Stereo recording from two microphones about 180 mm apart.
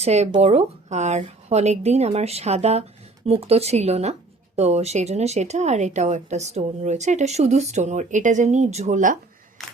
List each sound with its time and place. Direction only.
0.0 s speech: 35° right (ahead or behind)